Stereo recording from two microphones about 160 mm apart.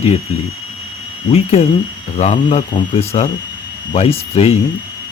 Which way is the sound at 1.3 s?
40° left (ahead or behind).